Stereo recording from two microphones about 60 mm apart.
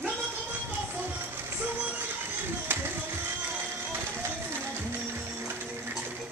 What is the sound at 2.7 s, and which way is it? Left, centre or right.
Music, right.